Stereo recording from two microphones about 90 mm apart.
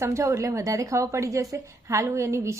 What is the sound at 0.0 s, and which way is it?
A woman's voice, 30° right (ahead or behind).